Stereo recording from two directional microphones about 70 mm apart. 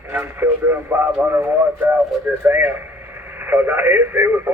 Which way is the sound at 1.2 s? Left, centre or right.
Right.